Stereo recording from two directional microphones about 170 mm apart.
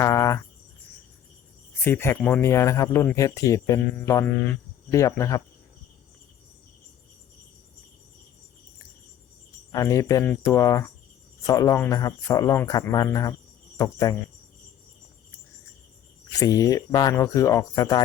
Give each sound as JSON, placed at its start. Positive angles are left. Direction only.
{"t": 0.0, "sound": "cricket", "side_deg": 15}
{"t": 1.8, "sound": "a man's voice", "side_deg": 15}
{"t": 9.7, "sound": "a man's voice", "side_deg": 20}
{"t": 16.3, "sound": "a man's voice", "side_deg": 20}